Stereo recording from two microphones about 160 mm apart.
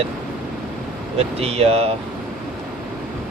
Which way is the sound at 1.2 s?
40° right (ahead or behind).